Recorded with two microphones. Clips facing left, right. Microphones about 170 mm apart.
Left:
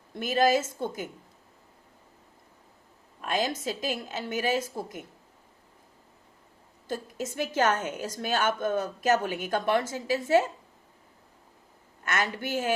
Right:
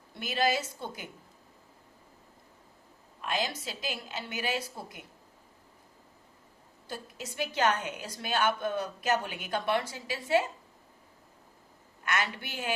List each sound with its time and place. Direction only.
0.1 s a woman's voice: 50° left (ahead or behind)
3.2 s a woman's voice: 45° left (ahead or behind)
6.8 s a woman's voice: 45° left (ahead or behind)
12.0 s a woman's voice: 45° left (ahead or behind)